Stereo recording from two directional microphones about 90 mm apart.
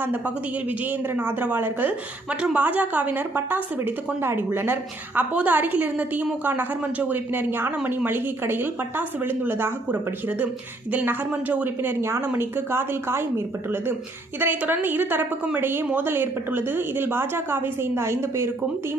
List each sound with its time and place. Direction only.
0.0 s a woman's voice: 20° right (ahead or behind)